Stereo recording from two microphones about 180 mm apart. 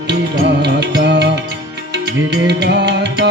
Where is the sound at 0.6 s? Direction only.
70° right (ahead or behind).